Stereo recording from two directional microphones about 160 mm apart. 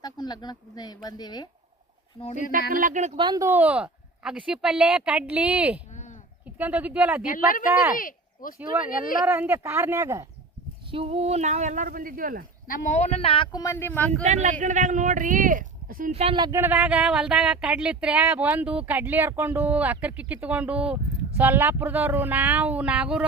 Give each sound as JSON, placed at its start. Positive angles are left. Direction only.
{"t": 0.0, "sound": "speech", "side_deg": 25}
{"t": 2.5, "sound": "speech", "side_deg": -60}
{"t": 3.2, "sound": "speech", "side_deg": -25}
{"t": 5.9, "sound": "sheep", "side_deg": 50}
{"t": 6.6, "sound": "speech", "side_deg": -10}
{"t": 7.3, "sound": "speech", "side_deg": 60}
{"t": 7.6, "sound": "speech", "side_deg": -10}
{"t": 7.9, "sound": "speech", "side_deg": 60}
{"t": 9.2, "sound": "speech", "side_deg": -15}
{"t": 10.9, "sound": "speech", "side_deg": -40}
{"t": 13.1, "sound": "speech", "side_deg": 35}
{"t": 14.3, "sound": "speech", "side_deg": -45}
{"t": 16.1, "sound": "speech", "side_deg": -40}
{"t": 16.4, "sound": "speech", "side_deg": -15}